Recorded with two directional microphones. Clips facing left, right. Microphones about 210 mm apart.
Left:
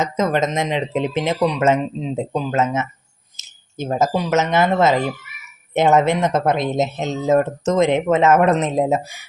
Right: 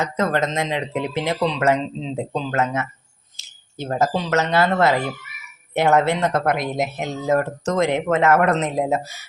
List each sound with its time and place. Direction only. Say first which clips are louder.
0.0 s speech: left 2 dB; 20° left (ahead or behind)